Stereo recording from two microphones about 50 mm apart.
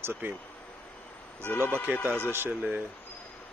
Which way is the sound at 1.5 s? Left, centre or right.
Left.